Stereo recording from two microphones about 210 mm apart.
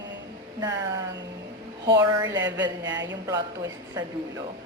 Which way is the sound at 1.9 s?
20° right (ahead or behind).